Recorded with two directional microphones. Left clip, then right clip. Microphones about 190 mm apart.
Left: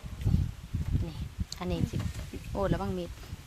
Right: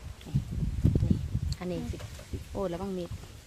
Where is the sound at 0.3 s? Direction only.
5° left (ahead or behind).